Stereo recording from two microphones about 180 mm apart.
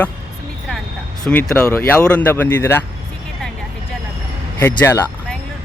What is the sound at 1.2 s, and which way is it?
Speech, 10° left (ahead or behind).